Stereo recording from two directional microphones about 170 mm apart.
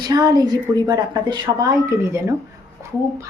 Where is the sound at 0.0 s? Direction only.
25° right (ahead or behind).